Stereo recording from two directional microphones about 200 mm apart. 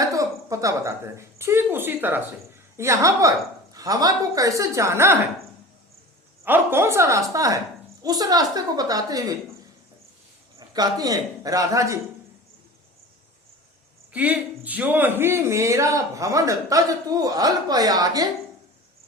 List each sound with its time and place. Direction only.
0.0 s a woman's voice: 15° right (ahead or behind)
6.4 s a man's voice: 10° right (ahead or behind)
10.8 s a man's voice: 20° right (ahead or behind)
14.1 s a man's voice: 5° right (ahead or behind)